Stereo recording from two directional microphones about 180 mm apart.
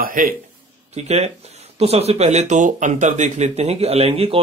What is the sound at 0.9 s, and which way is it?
Speech, 35° right (ahead or behind).